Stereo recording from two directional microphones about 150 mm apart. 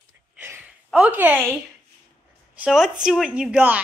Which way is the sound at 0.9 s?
10° right (ahead or behind).